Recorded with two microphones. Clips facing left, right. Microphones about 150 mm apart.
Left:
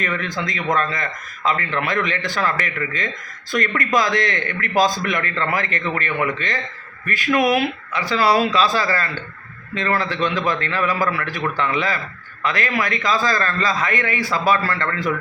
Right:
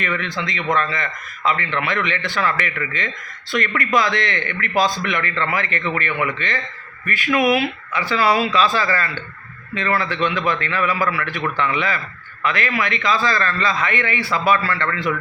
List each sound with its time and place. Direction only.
0.0 s a man's voice: 40° left (ahead or behind)